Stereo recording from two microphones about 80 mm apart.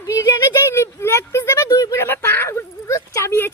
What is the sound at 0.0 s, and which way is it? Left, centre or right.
Speech, left.